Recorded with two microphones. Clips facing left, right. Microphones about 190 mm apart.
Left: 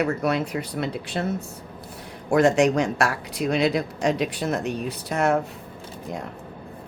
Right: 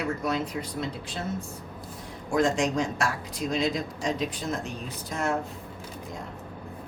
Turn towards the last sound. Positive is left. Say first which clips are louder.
# left 7 dB
turn(degrees=70)  # may be behind; listen again after turning